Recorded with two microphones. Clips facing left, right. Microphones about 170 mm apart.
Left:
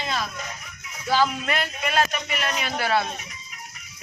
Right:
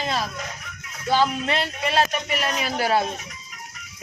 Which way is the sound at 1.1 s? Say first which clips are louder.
Right 1 dB; 20° right (ahead or behind).